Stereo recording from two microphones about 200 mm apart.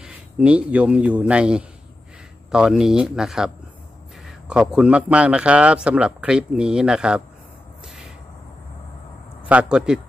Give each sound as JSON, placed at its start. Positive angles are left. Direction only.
{"t": 0.0, "sound": "a man's voice", "side_deg": -5}
{"t": 9.5, "sound": "a man's voice", "side_deg": -5}